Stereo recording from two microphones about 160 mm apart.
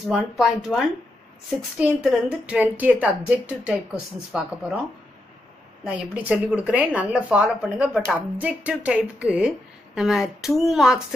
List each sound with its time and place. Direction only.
0.1 s speech: centre (ahead or behind)
5.9 s speech: 10° right (ahead or behind)